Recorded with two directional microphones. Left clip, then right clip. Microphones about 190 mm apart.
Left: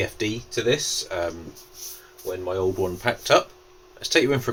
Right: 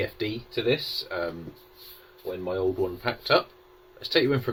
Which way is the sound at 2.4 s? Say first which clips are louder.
Left 2 dB; 30° left (ahead or behind).